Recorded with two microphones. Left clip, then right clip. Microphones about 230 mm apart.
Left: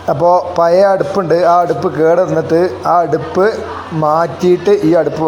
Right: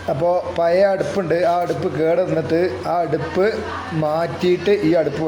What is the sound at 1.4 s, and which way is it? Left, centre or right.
A man's voice, centre.